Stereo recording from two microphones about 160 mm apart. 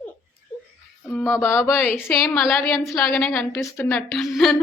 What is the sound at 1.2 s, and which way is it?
Speech, 15° left (ahead or behind).